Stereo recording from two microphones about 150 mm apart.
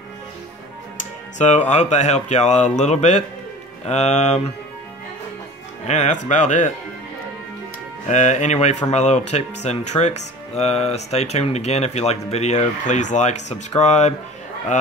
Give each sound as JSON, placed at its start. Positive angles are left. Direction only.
{"t": 1.4, "sound": "speech", "side_deg": 50}
{"t": 5.9, "sound": "speech", "side_deg": 50}
{"t": 8.1, "sound": "speech", "side_deg": 50}